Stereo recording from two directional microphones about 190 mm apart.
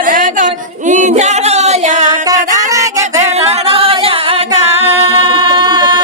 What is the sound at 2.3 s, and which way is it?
Music, 40° right (ahead or behind).